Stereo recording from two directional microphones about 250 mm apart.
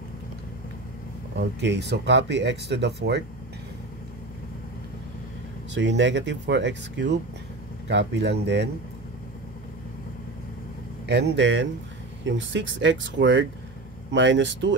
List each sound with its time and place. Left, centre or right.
1.6 s speech: right
5.8 s speech: right
11.1 s speech: right